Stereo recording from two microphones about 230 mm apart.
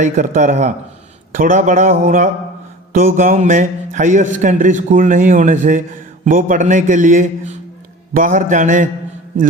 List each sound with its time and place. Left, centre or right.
0.0 s a man's voice: right